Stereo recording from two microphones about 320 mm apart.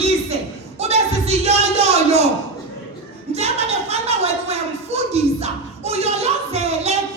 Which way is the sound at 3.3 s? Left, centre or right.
Centre.